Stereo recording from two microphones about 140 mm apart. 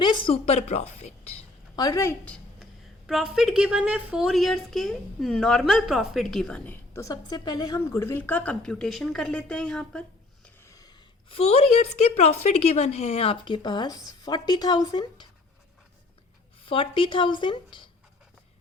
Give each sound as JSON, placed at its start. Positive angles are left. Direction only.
{"t": 0.0, "sound": "a sound", "side_deg": 35}
{"t": 1.7, "sound": "speech", "side_deg": 25}
{"t": 3.1, "sound": "a woman's voice", "side_deg": 0}
{"t": 6.9, "sound": "a woman's voice", "side_deg": 25}
{"t": 10.7, "sound": "a sound", "side_deg": 25}
{"t": 11.3, "sound": "speech", "side_deg": 45}
{"t": 16.6, "sound": "speech", "side_deg": 40}